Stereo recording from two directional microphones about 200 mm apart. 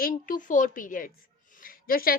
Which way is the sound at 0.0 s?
45° left (ahead or behind).